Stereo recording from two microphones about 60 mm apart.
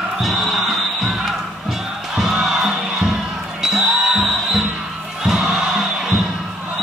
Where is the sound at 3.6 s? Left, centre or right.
Centre.